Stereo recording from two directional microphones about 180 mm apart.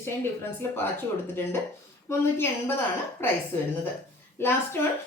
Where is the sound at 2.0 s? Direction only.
15° left (ahead or behind).